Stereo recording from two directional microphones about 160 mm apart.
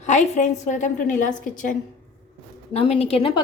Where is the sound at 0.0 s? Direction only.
45° left (ahead or behind).